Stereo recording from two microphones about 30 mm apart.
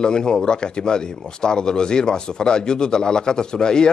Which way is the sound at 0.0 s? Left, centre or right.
Left.